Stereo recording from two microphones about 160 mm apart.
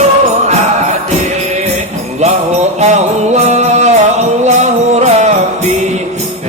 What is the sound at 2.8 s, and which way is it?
Music, 45° right (ahead or behind).